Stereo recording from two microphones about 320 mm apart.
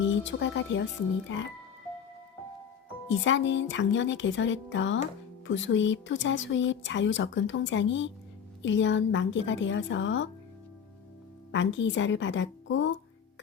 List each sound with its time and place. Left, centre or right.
0.0 s speech: left
3.1 s speech: left
11.5 s speech: left